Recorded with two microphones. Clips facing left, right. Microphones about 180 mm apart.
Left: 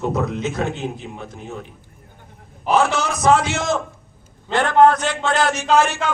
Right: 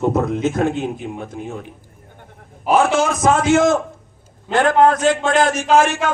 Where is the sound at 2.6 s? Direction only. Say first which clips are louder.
Right 3 dB; 50° right (ahead or behind).